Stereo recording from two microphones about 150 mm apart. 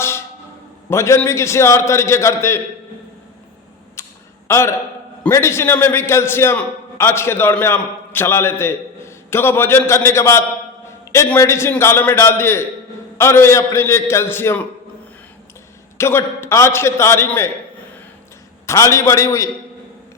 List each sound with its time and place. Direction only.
0.9 s a man's voice: 20° left (ahead or behind)
4.0 s a sound: 20° left (ahead or behind)
4.4 s a man's voice: 20° left (ahead or behind)
16.0 s a man's voice: 15° left (ahead or behind)
18.6 s a man's voice: 20° left (ahead or behind)